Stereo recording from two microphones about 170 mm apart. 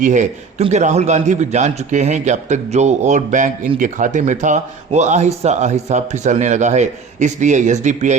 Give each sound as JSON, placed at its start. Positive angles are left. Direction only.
{"t": 0.0, "sound": "speech", "side_deg": -45}